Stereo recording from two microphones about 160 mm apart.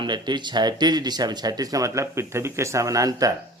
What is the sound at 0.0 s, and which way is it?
Speech, 30° right (ahead or behind).